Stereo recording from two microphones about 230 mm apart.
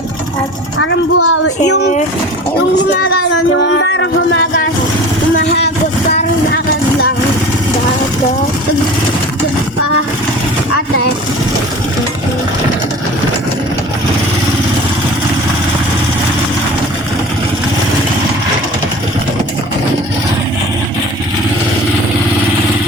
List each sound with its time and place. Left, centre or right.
0.8 s speech: left
3.6 s speech: left